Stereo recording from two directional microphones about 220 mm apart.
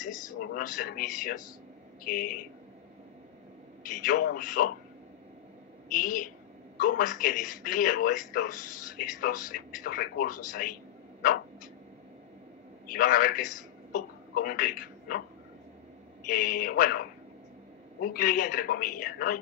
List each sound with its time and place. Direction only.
0.6 s speech: 40° left (ahead or behind)
3.8 s speech: 40° left (ahead or behind)
5.9 s speech: 40° left (ahead or behind)
12.8 s a man's voice: 40° left (ahead or behind)
16.3 s speech: 40° left (ahead or behind)
18.1 s speech: 40° left (ahead or behind)